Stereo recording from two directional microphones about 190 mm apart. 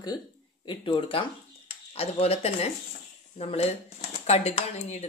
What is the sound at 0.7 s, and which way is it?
Speech, 25° left (ahead or behind).